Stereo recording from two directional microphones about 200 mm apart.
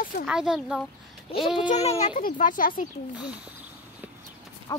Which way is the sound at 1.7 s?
35° left (ahead or behind).